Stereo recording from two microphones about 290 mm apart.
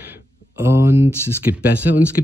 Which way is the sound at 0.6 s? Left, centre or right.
Centre.